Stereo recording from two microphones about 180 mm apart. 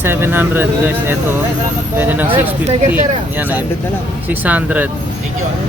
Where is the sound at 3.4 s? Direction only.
10° right (ahead or behind).